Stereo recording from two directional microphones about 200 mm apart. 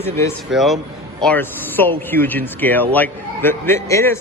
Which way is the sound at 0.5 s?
Centre (ahead or behind).